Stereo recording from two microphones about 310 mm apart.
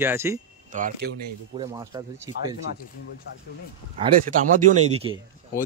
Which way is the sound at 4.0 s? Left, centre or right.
Right.